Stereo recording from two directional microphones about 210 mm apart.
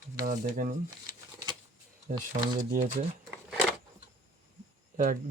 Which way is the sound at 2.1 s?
35° right (ahead or behind).